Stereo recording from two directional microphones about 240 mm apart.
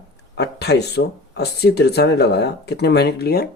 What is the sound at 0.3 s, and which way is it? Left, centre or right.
Speech, left.